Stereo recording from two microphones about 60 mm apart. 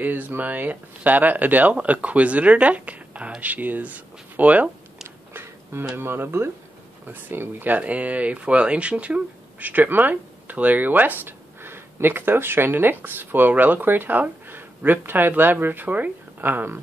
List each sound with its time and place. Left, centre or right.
0.0 s speech: right
5.0 s a sound: right
5.9 s speech: right